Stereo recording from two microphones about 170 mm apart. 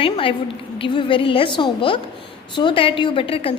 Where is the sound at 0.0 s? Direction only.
30° left (ahead or behind).